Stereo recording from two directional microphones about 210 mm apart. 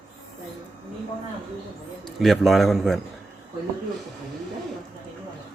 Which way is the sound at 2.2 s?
Centre (ahead or behind).